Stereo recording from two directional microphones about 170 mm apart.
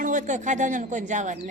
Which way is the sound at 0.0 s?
45° right (ahead or behind).